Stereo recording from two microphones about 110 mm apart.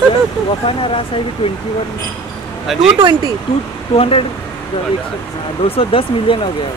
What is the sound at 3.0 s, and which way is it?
Speech, 40° right (ahead or behind).